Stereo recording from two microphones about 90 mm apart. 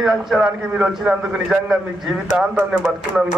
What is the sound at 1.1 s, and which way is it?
A man's voice, 5° right (ahead or behind).